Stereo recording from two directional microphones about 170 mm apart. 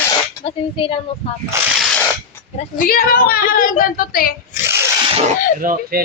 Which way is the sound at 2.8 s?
55° left (ahead or behind).